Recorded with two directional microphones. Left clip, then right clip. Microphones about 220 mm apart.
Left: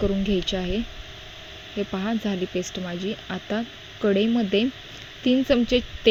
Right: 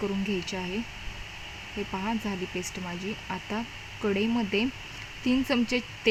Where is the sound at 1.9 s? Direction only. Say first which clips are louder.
Left 3 dB; 15° left (ahead or behind).